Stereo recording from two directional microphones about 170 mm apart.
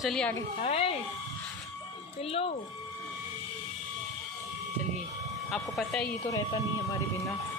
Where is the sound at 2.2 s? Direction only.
35° left (ahead or behind).